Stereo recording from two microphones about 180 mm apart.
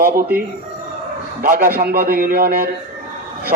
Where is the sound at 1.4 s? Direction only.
50° right (ahead or behind).